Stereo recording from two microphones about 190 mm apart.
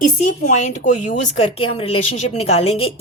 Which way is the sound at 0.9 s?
40° left (ahead or behind).